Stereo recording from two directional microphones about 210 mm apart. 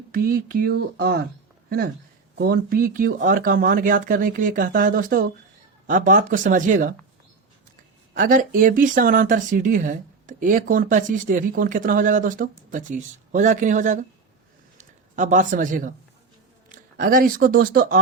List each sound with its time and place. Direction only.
0.1 s speech: 45° right (ahead or behind)
2.4 s speech: 45° right (ahead or behind)
8.1 s speech: 40° right (ahead or behind)